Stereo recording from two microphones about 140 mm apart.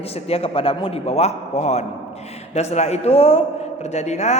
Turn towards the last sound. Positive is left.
turn(degrees=50)  # may be behind; listen again after turning